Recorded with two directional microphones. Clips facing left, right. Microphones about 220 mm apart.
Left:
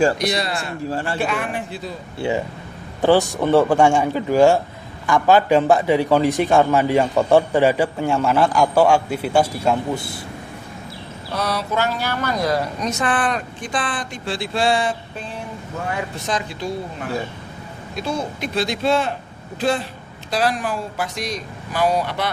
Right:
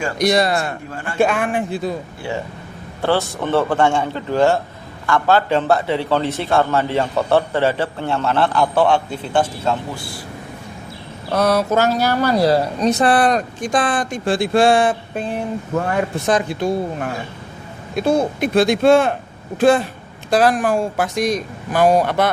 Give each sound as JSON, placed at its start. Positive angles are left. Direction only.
{"t": 0.2, "sound": "speech", "side_deg": -45}
{"t": 0.9, "sound": "a man's voice", "side_deg": 35}
{"t": 2.2, "sound": "a man's voice", "side_deg": 20}
{"t": 9.9, "sound": "speech", "side_deg": 20}
{"t": 11.3, "sound": "speech", "side_deg": -50}
{"t": 17.9, "sound": "speech", "side_deg": -55}